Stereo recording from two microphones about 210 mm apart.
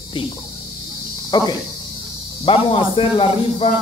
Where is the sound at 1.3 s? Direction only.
20° left (ahead or behind).